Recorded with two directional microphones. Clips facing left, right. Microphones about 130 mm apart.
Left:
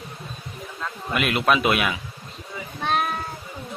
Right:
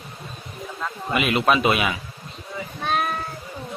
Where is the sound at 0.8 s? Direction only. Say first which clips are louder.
Right 2 dB; centre (ahead or behind).